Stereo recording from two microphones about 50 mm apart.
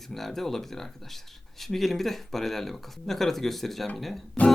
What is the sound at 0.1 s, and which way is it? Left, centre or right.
Speech, centre.